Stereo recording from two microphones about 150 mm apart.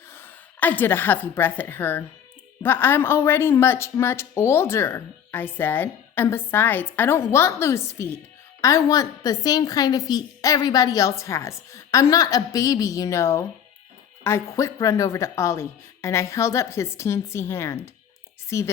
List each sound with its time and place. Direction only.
0.1 s a woman's voice: 15° left (ahead or behind)